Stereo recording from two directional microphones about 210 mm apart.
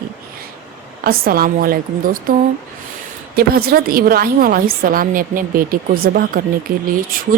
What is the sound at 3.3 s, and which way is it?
Speech, 45° right (ahead or behind).